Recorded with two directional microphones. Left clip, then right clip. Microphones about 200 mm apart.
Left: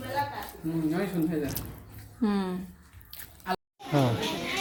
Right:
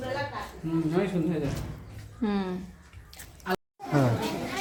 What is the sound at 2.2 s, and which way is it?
Speech, 10° left (ahead or behind).